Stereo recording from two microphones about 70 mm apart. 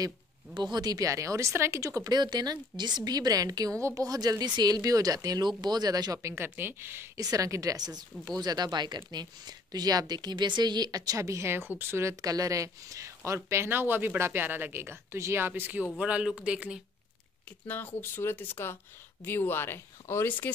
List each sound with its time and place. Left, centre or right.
0.6 s speech: right
1.0 s speech: right
2.0 s speech: right
5.6 s speech: right
6.1 s speech: right
7.2 s speech: right
12.2 s speech: right
16.0 s speech: centre
17.6 s speech: left